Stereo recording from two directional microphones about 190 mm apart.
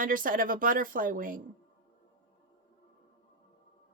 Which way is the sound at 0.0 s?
45° right (ahead or behind).